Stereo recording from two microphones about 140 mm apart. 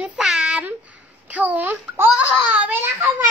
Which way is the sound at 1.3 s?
10° right (ahead or behind).